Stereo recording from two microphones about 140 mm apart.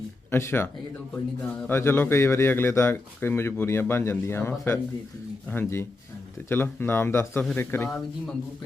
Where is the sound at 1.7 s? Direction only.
15° left (ahead or behind).